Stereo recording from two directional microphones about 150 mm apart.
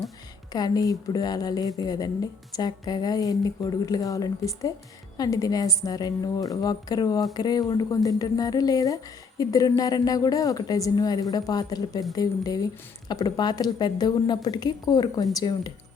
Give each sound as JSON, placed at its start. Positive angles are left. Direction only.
{"t": 0.5, "sound": "a woman's voice", "side_deg": 25}